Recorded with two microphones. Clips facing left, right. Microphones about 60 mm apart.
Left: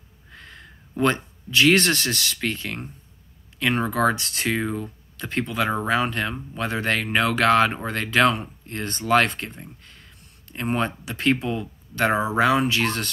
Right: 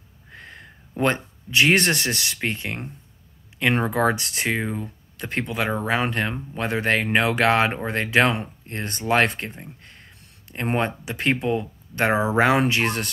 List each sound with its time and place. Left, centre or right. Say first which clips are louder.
0.3 s speech: right 2 dB; right